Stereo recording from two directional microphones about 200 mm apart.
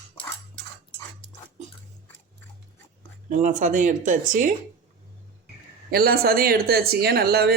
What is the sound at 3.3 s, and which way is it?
Speech, 40° right (ahead or behind).